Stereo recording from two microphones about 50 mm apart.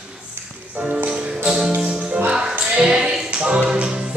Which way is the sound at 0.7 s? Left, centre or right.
Right.